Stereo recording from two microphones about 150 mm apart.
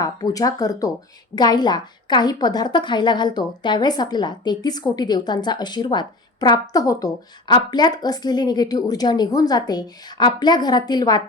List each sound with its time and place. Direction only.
0.0 s a woman's voice: 25° left (ahead or behind)